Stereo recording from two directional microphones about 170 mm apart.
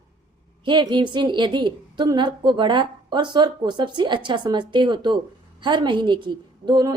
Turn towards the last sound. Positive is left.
turn(degrees=-25)  # may be behind; listen again after turning